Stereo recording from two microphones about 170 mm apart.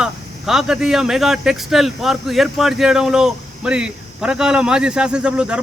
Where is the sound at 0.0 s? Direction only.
5° right (ahead or behind).